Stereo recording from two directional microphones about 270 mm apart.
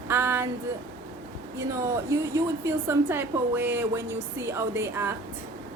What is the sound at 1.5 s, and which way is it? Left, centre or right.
A woman's voice, centre.